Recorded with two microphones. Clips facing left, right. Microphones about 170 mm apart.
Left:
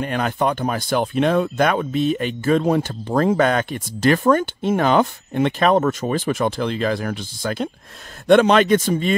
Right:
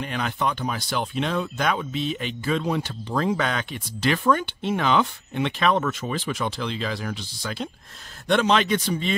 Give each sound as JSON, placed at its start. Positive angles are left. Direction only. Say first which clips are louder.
{"t": 0.0, "sound": "speech", "louder": "left 6 dB", "side_deg": 50}